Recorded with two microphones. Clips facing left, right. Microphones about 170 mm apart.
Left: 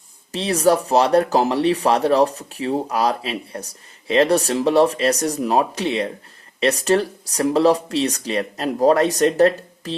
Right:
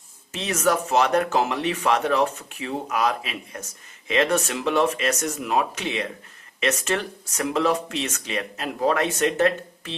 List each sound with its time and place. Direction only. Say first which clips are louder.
0.3 s speech: left 6 dB; 35° left (ahead or behind)